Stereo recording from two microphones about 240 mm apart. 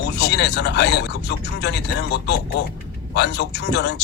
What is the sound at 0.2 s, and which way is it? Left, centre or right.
Speech, left.